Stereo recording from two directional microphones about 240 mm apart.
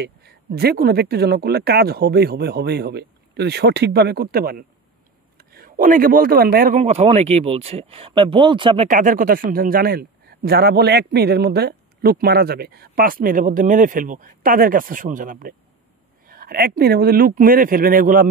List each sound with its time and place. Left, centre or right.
0.0 s speech: right
6.8 s speech: right
8.8 s speech: right